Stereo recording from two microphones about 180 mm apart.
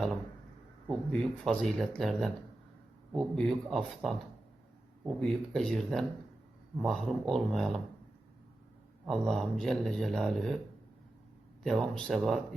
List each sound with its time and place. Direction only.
0.9 s a man's voice: centre (ahead or behind)
9.0 s a man's voice: centre (ahead or behind)
11.6 s a man's voice: 5° left (ahead or behind)